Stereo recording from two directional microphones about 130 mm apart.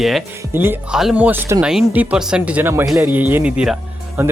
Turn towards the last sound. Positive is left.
turn(degrees=-15)  # may be behind; listen again after turning